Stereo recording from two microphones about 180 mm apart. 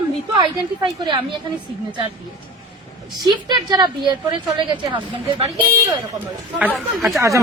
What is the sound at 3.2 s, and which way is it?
A woman's voice, 20° right (ahead or behind).